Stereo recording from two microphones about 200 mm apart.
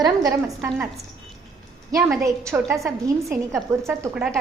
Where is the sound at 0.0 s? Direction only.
15° right (ahead or behind).